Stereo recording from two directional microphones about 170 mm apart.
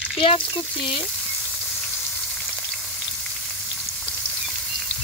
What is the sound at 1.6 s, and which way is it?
Frying, centre (ahead or behind).